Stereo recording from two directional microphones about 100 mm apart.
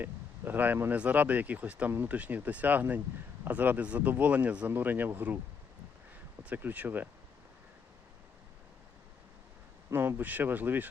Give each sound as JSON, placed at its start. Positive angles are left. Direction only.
{"t": 0.0, "sound": "speech", "side_deg": -20}
{"t": 6.4, "sound": "speech", "side_deg": -15}
{"t": 9.9, "sound": "speech", "side_deg": -20}